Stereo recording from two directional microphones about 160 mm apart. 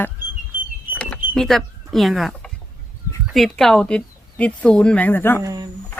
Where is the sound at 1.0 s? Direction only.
10° left (ahead or behind).